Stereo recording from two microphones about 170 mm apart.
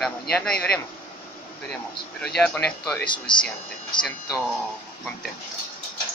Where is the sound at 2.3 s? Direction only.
5° left (ahead or behind).